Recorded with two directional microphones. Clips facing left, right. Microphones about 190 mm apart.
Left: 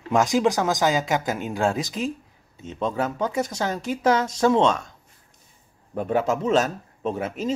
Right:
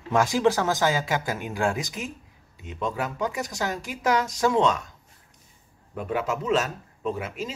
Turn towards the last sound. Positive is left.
turn(degrees=35)  # may be behind; listen again after turning